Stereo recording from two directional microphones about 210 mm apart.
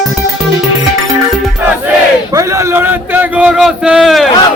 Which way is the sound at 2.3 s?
15° right (ahead or behind).